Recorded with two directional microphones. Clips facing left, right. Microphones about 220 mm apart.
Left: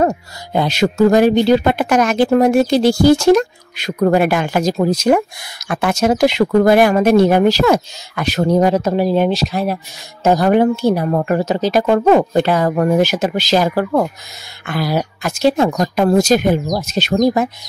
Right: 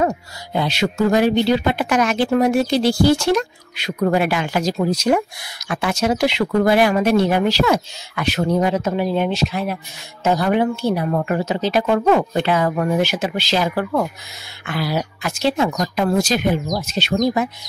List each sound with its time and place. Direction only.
0.0 s speech: 45° left (ahead or behind)